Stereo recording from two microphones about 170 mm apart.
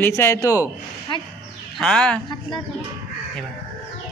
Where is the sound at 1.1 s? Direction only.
30° left (ahead or behind).